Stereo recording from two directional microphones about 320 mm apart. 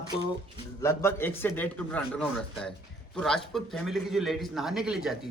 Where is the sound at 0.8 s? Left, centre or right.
Centre.